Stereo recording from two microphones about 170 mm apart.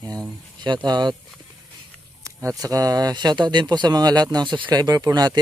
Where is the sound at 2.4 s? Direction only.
20° right (ahead or behind).